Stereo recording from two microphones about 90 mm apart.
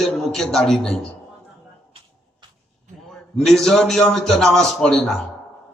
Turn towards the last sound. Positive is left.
turn(degrees=5)  # may be behind; listen again after turning